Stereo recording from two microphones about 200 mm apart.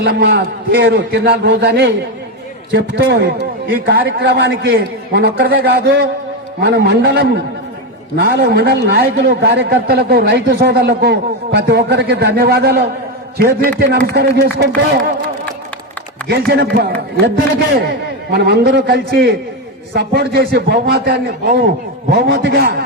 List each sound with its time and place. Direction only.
0.0 s a man's voice: 55° right (ahead or behind)
17.2 s a man's voice: 55° right (ahead or behind)